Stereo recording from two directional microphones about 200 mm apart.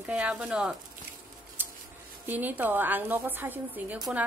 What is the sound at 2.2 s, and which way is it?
A woman's voice, 10° right (ahead or behind).